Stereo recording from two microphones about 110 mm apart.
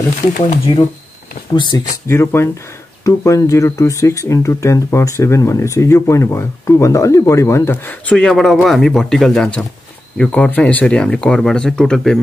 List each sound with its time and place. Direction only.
0.4 s speech: 50° left (ahead or behind)
2.0 s speech: 20° left (ahead or behind); by 12.2 s 5° left (ahead or behind)